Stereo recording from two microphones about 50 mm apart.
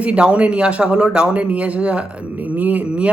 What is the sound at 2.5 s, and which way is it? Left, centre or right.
Speech, right.